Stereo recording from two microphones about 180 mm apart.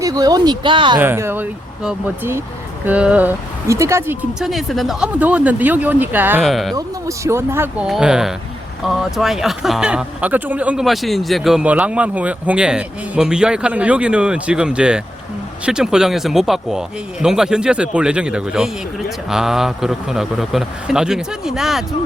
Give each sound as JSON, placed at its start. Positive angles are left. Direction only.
{"t": 0.0, "sound": "speech", "side_deg": -20}
{"t": 0.9, "sound": "speech", "side_deg": -10}
{"t": 6.4, "sound": "speech", "side_deg": 0}
{"t": 6.7, "sound": "speech", "side_deg": -15}